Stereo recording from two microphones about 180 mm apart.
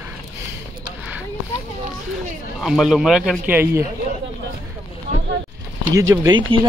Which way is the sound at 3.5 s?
15° right (ahead or behind).